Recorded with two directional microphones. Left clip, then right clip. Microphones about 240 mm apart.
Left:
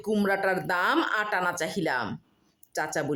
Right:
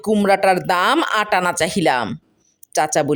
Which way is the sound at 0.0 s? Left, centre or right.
Right.